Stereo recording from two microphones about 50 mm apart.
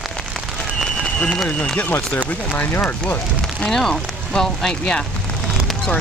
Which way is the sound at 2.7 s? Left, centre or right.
Left.